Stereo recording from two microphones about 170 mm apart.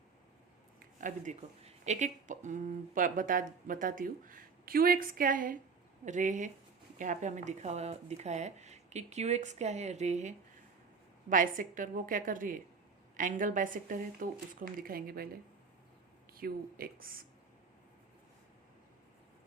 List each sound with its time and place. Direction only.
0.8 s speech: 50° right (ahead or behind)
16.4 s speech: 60° right (ahead or behind)